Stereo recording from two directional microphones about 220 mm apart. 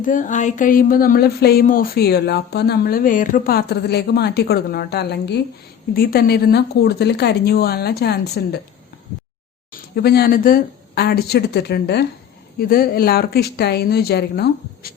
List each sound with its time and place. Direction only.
0.0 s speech: 35° left (ahead or behind)
9.7 s speech: 45° left (ahead or behind)